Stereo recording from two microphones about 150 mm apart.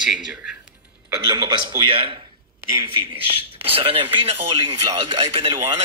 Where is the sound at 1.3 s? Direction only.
30° right (ahead or behind).